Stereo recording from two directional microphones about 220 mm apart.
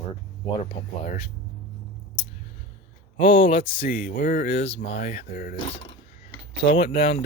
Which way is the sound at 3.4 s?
40° left (ahead or behind).